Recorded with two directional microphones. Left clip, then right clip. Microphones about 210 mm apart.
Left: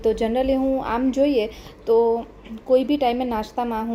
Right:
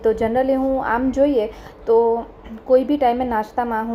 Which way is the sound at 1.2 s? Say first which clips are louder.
Right 3 dB; 25° right (ahead or behind).